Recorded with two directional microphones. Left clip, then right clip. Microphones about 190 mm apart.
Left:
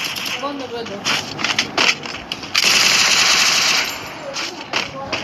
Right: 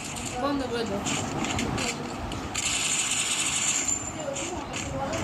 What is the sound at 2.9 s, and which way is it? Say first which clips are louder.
Machine gun: left 15 dB; 45° left (ahead or behind).